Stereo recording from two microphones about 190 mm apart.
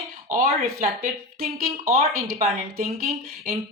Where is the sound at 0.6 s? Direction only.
50° right (ahead or behind).